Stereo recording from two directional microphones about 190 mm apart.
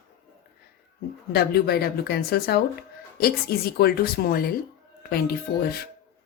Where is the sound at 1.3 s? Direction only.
55° left (ahead or behind).